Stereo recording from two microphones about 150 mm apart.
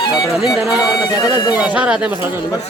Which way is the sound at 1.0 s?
25° left (ahead or behind).